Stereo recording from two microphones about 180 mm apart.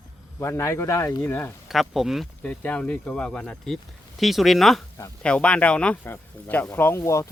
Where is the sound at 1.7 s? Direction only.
Centre (ahead or behind).